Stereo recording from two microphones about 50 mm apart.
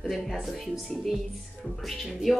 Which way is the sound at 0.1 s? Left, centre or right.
Centre.